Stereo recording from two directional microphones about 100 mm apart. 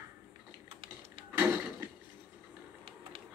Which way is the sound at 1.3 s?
20° right (ahead or behind).